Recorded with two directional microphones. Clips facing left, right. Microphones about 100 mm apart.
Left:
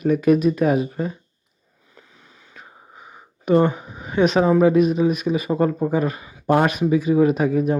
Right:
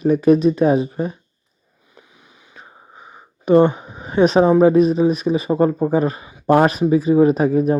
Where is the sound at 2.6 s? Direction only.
30° right (ahead or behind).